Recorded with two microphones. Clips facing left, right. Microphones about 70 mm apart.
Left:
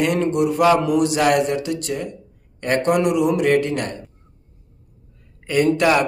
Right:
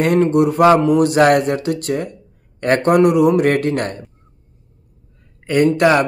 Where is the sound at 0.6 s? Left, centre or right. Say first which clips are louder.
Right 4 dB; right.